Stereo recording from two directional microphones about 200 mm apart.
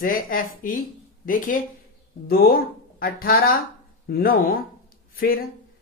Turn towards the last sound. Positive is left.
turn(degrees=45)  # may be behind; listen again after turning